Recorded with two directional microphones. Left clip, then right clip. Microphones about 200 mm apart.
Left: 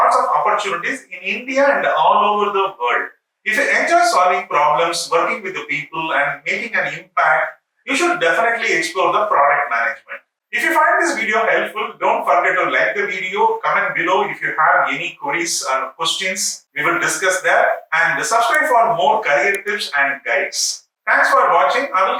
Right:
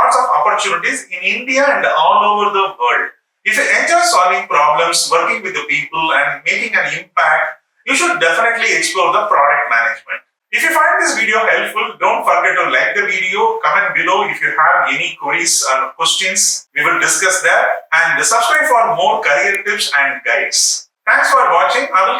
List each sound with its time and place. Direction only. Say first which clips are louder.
0.1 s a sound: right 3 dB; 10° left (ahead or behind)
1.2 s a man's voice: right 3 dB; 5° left (ahead or behind)
16.7 s a man's voice: right 3 dB; 15° left (ahead or behind)
17.0 s a man's voice: right 4 dB; 5° left (ahead or behind)